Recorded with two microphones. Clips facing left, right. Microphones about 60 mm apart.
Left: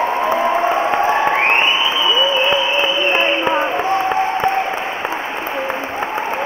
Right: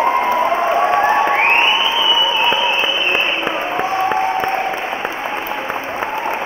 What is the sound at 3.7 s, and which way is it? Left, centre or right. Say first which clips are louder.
Applause: even; centre.